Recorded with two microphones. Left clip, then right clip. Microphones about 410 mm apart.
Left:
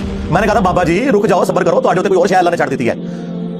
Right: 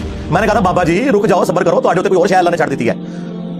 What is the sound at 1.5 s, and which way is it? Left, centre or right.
Speech, centre.